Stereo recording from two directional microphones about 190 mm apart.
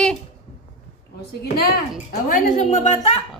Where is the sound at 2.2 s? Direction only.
40° left (ahead or behind).